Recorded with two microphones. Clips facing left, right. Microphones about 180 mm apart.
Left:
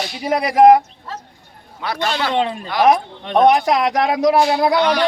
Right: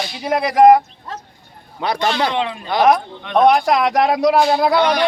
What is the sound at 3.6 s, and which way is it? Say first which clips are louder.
Speech: right 1 dB; centre (ahead or behind).